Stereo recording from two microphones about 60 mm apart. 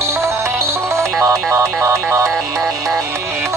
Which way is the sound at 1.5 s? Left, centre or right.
Right.